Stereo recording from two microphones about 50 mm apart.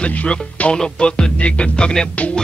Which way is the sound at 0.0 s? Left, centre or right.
Left.